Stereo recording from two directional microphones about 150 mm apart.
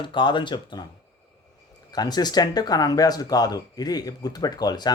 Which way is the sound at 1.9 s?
25° left (ahead or behind).